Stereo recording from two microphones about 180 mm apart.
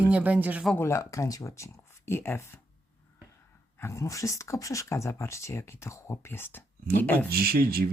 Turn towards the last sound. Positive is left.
turn(degrees=-55)  # may be behind; listen again after turning